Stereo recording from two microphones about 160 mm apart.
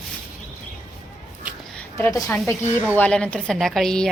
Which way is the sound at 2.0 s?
20° left (ahead or behind).